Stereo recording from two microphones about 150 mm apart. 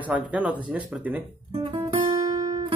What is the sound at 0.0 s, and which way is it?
Speech, 10° right (ahead or behind).